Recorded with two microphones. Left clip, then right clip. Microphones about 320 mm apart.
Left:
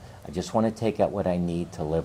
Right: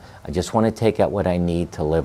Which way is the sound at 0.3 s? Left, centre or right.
Right.